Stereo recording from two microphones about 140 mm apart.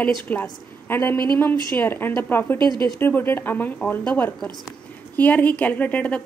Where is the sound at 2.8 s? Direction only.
15° left (ahead or behind).